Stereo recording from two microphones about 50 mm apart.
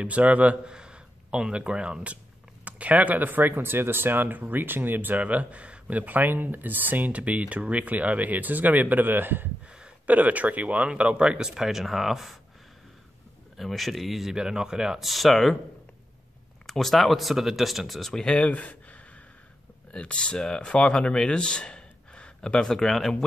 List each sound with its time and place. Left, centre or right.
0.0 s a man's voice: right
10.0 s speech: right; by 12.4 s centre
13.6 s speech: centre
15.0 s speech: centre
16.6 s speech: centre
18.2 s speech: left; by 23.1 s centre